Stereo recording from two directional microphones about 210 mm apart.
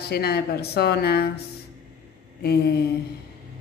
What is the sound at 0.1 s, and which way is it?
A woman's voice, 50° left (ahead or behind).